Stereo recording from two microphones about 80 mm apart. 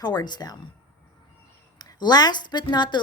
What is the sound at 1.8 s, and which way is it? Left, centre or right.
A woman's voice, left.